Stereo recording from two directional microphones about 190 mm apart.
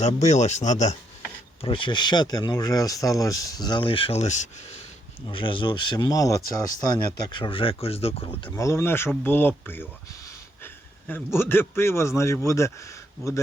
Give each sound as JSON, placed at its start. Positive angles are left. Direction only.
{"t": 0.0, "sound": "speech", "side_deg": 35}
{"t": 1.6, "sound": "speech", "side_deg": 25}
{"t": 5.3, "sound": "speech", "side_deg": 25}
{"t": 8.4, "sound": "speech", "side_deg": 15}
{"t": 11.1, "sound": "speech", "side_deg": 10}